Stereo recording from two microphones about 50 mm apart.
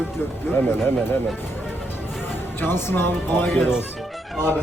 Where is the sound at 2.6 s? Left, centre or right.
Left.